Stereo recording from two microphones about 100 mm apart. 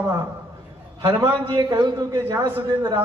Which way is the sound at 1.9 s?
30° right (ahead or behind).